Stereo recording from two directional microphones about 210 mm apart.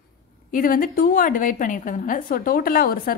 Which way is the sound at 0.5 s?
40° left (ahead or behind).